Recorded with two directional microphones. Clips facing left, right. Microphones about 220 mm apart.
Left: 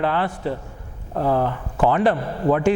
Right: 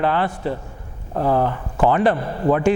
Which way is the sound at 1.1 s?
25° right (ahead or behind).